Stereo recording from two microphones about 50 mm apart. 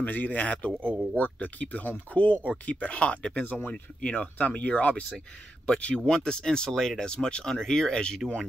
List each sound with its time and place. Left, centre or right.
0.0 s speech: left; by 8.2 s centre